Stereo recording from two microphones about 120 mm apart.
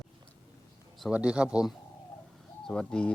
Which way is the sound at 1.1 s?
10° right (ahead or behind).